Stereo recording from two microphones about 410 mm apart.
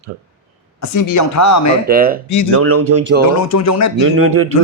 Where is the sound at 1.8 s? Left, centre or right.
Right.